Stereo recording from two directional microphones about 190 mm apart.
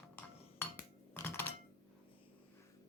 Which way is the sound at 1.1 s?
10° left (ahead or behind).